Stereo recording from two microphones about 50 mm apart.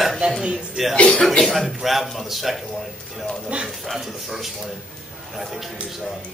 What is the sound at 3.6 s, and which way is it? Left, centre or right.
Speech, centre.